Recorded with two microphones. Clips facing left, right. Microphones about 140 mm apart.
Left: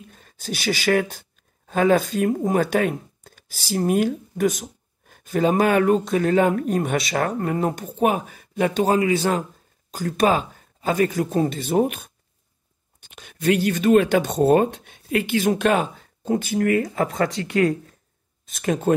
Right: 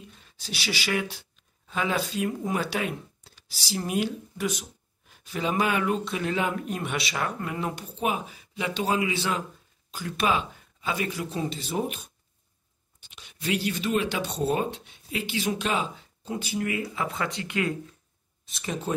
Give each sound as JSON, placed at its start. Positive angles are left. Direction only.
{"t": 0.1, "sound": "speech", "side_deg": 45}
{"t": 18.5, "sound": "speech", "side_deg": 50}